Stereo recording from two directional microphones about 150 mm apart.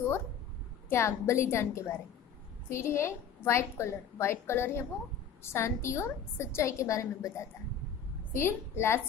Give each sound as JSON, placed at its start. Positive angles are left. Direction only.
{"t": 0.8, "sound": "a woman's voice", "side_deg": 15}